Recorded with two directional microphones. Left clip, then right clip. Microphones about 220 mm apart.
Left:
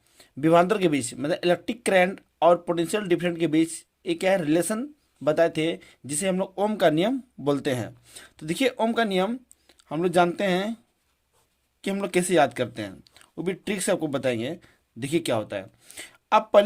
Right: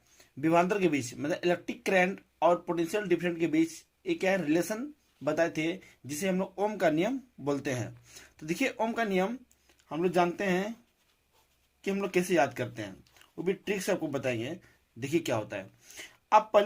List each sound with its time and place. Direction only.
0.2 s speech: 45° left (ahead or behind)
9.6 s speech: 65° left (ahead or behind); by 10.7 s 50° left (ahead or behind)
11.9 s speech: 45° left (ahead or behind)